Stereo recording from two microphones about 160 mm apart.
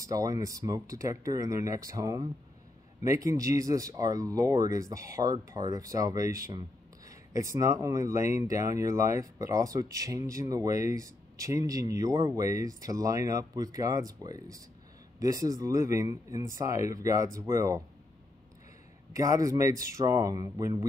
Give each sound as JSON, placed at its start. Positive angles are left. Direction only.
{"t": 0.0, "sound": "speech", "side_deg": -20}
{"t": 19.1, "sound": "speech", "side_deg": -20}